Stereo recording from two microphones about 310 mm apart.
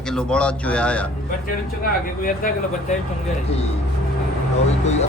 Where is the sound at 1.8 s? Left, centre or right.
Left.